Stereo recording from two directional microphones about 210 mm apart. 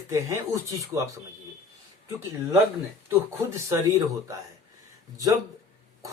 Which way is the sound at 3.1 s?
15° right (ahead or behind).